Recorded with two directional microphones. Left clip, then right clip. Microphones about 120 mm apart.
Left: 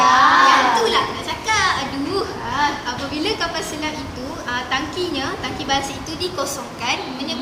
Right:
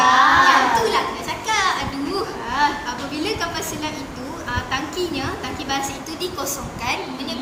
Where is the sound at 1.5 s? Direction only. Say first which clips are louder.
Left 2 dB; 40° right (ahead or behind).